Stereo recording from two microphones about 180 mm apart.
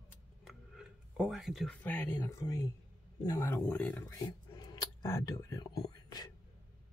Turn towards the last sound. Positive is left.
turn(degrees=20)  # may be behind; listen again after turning